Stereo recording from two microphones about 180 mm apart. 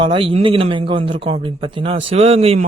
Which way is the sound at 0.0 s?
30° right (ahead or behind).